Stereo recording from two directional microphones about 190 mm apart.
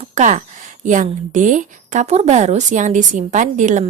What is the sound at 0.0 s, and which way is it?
Speech, 35° right (ahead or behind).